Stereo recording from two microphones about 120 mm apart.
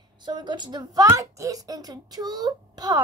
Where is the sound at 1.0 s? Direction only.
25° right (ahead or behind).